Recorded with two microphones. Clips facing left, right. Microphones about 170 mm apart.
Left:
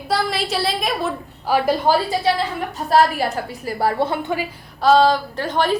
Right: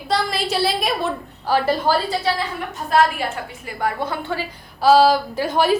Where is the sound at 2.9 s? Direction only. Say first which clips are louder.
Left 2 dB; 40° left (ahead or behind); by 4.4 s 15° left (ahead or behind).